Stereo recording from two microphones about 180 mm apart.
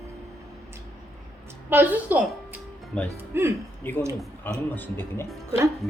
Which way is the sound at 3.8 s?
10° left (ahead or behind).